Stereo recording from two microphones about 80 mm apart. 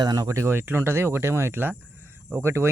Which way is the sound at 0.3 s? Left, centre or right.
Right.